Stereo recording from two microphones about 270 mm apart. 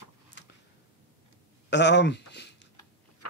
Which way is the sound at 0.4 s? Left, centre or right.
Left.